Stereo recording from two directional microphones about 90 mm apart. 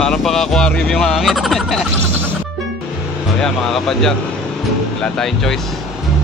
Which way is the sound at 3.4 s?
5° left (ahead or behind).